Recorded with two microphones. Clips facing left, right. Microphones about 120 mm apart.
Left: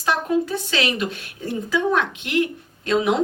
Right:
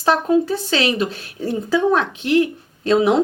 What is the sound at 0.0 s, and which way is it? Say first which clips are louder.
Speech: right 5 dB; 35° right (ahead or behind).